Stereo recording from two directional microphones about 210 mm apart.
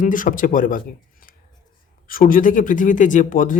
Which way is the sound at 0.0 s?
40° left (ahead or behind).